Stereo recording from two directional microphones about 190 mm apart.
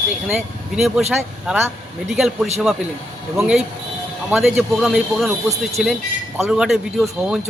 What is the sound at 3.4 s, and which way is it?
A man's voice, 5° right (ahead or behind).